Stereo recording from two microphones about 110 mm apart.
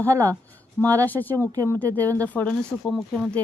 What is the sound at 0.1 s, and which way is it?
Speech, 30° right (ahead or behind).